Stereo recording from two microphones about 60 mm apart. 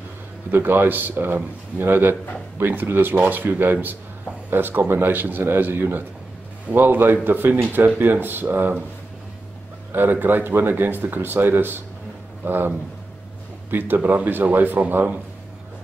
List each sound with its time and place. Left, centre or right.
0.5 s speech: right
9.9 s speech: right